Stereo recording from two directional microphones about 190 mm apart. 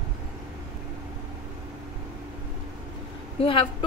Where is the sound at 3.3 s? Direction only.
25° left (ahead or behind).